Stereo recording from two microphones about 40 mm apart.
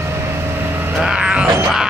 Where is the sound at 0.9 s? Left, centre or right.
Centre.